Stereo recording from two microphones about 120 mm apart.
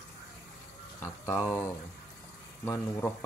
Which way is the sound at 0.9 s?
20° left (ahead or behind).